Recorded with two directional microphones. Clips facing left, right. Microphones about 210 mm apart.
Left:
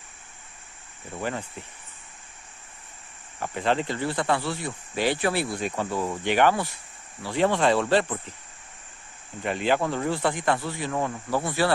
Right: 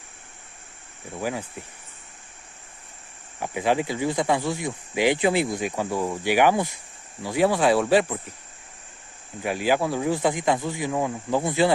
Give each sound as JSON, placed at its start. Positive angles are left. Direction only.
{"t": 1.2, "sound": "speech", "side_deg": -10}
{"t": 3.3, "sound": "speech", "side_deg": -10}
{"t": 9.4, "sound": "speech", "side_deg": -5}